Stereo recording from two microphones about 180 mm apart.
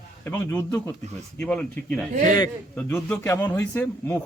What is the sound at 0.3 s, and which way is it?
A man's voice, 10° left (ahead or behind).